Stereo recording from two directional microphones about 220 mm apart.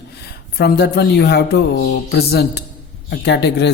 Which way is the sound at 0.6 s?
45° left (ahead or behind).